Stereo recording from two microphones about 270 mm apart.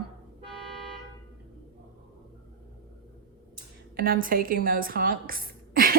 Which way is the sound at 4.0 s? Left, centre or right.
Right.